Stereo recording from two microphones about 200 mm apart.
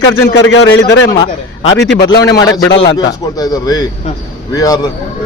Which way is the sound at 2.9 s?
20° left (ahead or behind).